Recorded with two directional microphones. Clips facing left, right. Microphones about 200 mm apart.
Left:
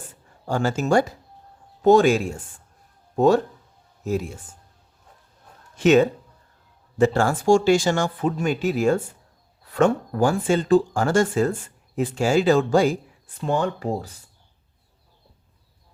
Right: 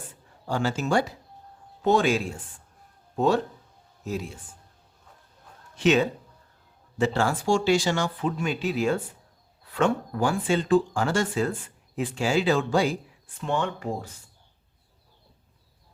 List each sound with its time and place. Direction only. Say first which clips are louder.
0.4 s speech: left 4 dB; 45° left (ahead or behind)
5.7 s speech: left 5 dB; 45° left (ahead or behind)